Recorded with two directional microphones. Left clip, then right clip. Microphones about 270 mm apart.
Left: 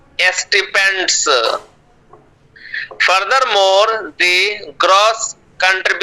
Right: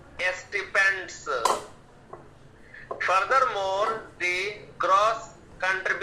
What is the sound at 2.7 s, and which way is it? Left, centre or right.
A man's voice, left.